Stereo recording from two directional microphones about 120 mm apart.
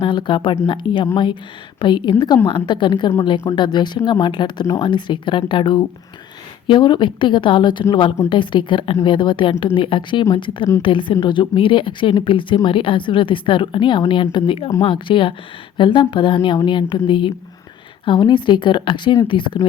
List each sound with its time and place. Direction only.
0.0 s speech: 40° left (ahead or behind)